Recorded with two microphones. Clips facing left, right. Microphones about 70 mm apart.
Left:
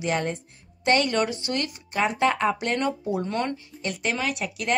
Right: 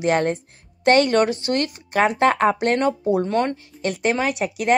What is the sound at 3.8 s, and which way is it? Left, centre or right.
Speech, right.